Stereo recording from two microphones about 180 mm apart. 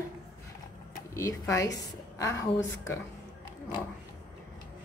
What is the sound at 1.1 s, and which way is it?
A woman's voice, 15° left (ahead or behind).